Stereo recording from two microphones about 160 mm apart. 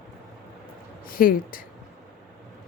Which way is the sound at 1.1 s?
60° left (ahead or behind).